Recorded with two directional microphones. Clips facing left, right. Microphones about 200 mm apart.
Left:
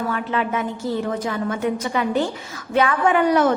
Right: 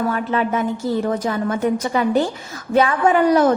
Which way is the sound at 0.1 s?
40° right (ahead or behind).